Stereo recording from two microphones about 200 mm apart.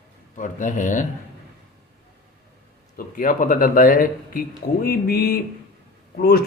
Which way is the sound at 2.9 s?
45° left (ahead or behind).